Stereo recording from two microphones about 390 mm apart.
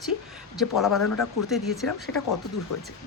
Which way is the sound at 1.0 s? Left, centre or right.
Left.